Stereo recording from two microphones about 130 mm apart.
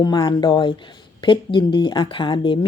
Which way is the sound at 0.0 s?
30° left (ahead or behind).